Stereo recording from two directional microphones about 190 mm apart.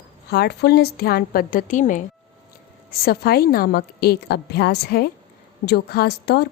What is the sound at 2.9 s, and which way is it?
A woman's voice, 55° left (ahead or behind).